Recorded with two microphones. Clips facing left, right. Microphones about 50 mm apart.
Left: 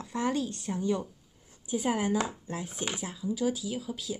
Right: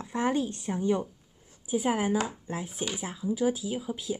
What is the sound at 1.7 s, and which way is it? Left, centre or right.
Speech, centre.